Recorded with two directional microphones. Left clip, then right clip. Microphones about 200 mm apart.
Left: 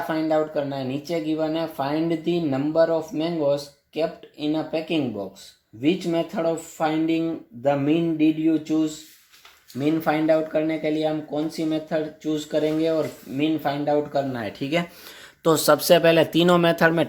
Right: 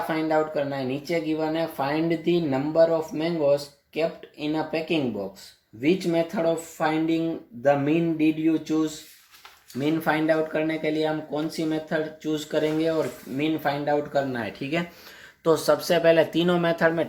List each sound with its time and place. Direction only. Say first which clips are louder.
0.1 s speech: left 2 dB; 15° left (ahead or behind)
15.4 s speech: left 4 dB; 40° left (ahead or behind)